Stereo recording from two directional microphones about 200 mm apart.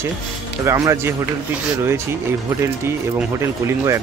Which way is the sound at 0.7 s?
15° right (ahead or behind).